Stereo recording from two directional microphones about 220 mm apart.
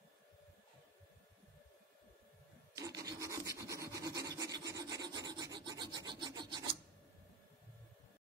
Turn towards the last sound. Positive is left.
turn(degrees=-20)  # may be behind; listen again after turning